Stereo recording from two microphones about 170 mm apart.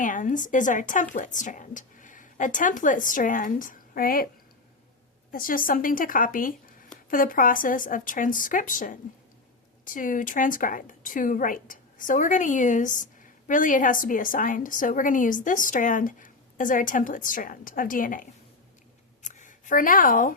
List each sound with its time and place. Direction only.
0.0 s a woman's voice: 50° left (ahead or behind)
5.3 s a woman's voice: 55° left (ahead or behind)